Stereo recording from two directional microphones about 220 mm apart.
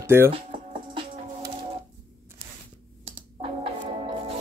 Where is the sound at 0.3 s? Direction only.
25° right (ahead or behind).